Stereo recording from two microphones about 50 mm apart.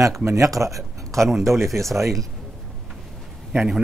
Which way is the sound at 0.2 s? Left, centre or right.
Right.